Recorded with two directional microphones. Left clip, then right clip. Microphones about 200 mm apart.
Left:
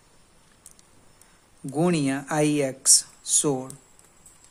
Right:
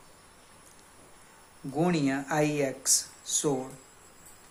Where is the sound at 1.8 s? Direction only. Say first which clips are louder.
Left 3 dB; 50° left (ahead or behind).